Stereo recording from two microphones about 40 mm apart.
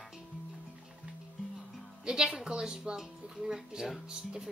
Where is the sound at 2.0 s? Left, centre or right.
Right.